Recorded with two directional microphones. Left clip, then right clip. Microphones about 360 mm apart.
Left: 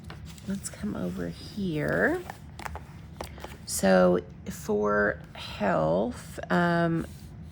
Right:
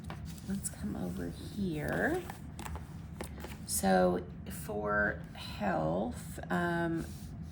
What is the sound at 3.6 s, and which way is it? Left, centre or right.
Speech, centre.